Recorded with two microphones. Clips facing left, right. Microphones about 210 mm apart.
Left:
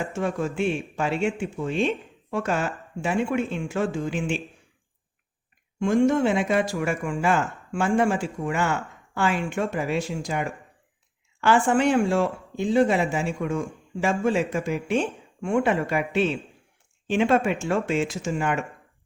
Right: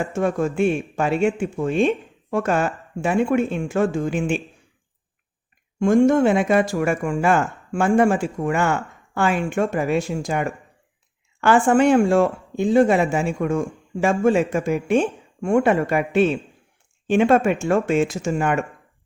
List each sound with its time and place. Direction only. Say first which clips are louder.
0.1 s speech: right 5 dB; 50° right (ahead or behind)
5.8 s speech: right 5 dB; 45° right (ahead or behind)